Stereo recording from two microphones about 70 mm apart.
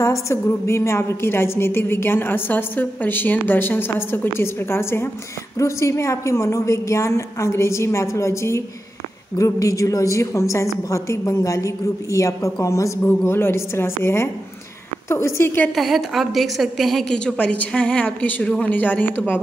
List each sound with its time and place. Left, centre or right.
0.0 s a woman's voice: left
5.6 s a woman's voice: left
13.0 s a woman's voice: left
15.7 s a woman's voice: centre
17.1 s a woman's voice: centre; by 19.4 s left